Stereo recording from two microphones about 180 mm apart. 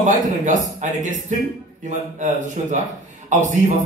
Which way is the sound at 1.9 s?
40° right (ahead or behind).